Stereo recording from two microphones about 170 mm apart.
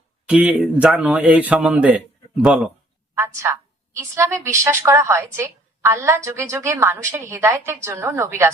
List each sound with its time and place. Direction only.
0.3 s a woman's voice: 5° right (ahead or behind)
3.2 s a woman's voice: 15° right (ahead or behind)